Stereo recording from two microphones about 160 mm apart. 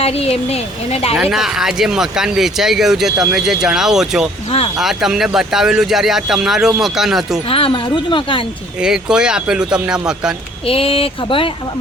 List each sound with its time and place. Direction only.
0.0 s speech: 40° left (ahead or behind)
1.2 s speech: 5° right (ahead or behind)
7.4 s speech: 35° left (ahead or behind)
8.8 s speech: 5° right (ahead or behind)
10.7 s speech: 35° left (ahead or behind)